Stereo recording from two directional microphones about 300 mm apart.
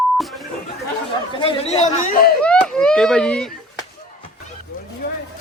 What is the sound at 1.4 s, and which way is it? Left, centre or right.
Speech, centre.